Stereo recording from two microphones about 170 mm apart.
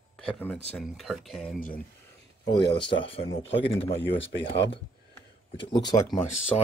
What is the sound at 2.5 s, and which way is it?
Speech, 30° left (ahead or behind).